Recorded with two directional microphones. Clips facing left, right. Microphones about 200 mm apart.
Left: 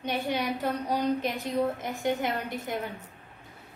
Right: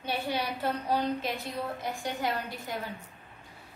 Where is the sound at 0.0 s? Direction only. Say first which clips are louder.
Left 3 dB; 20° left (ahead or behind).